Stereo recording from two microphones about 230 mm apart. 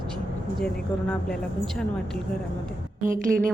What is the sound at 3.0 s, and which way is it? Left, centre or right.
Speech, right.